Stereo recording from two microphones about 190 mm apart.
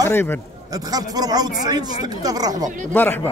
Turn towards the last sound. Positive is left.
turn(degrees=10)  # may be behind; listen again after turning